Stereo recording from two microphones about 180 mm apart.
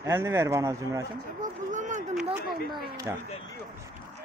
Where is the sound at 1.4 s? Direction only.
45° right (ahead or behind).